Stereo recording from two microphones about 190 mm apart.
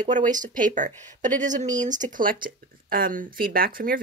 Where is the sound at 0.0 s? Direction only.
40° right (ahead or behind).